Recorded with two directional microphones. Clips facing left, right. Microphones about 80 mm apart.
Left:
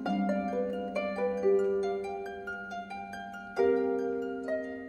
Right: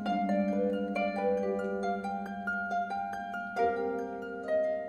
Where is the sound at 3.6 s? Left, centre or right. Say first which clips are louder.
Left 3 dB; centre.